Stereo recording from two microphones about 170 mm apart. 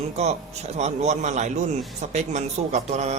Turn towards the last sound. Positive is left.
turn(degrees=-40)  # may be behind; listen again after turning